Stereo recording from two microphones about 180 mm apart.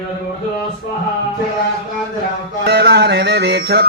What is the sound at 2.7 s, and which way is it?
Music, 65° right (ahead or behind).